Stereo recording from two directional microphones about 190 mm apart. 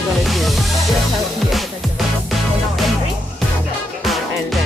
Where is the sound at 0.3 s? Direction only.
Centre (ahead or behind).